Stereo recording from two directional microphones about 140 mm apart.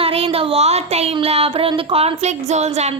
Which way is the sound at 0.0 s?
45° right (ahead or behind).